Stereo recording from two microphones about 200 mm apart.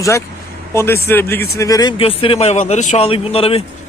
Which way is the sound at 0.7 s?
15° left (ahead or behind).